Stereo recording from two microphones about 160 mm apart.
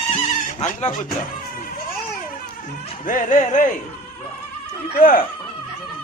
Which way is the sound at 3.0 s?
55° left (ahead or behind).